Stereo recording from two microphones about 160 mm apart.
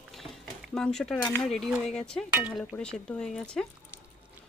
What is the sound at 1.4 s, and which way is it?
Speech, centre (ahead or behind).